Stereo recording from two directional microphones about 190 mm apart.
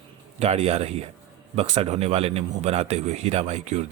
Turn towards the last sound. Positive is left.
turn(degrees=-35)  # may be behind; listen again after turning